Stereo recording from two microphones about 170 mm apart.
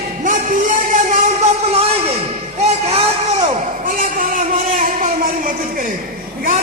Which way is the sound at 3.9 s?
55° right (ahead or behind).